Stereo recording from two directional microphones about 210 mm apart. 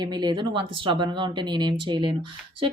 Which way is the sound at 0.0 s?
20° right (ahead or behind).